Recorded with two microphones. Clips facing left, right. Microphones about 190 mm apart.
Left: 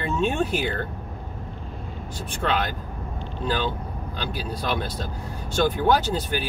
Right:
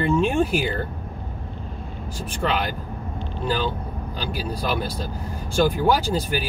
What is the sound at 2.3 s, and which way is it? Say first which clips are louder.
Speech: right 1 dB; 10° right (ahead or behind).